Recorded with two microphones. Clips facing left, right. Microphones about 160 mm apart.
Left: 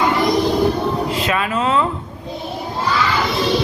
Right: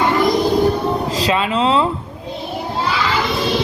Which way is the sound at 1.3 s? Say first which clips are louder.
Right 4 dB; 25° right (ahead or behind).